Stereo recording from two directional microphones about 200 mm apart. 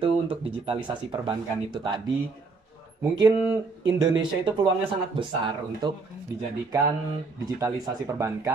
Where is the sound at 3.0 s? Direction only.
20° right (ahead or behind).